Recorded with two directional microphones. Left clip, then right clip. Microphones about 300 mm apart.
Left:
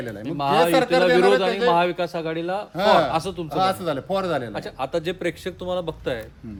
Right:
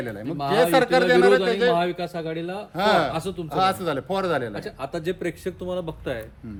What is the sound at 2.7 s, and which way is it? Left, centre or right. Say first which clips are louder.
Speech: left 2 dB; centre.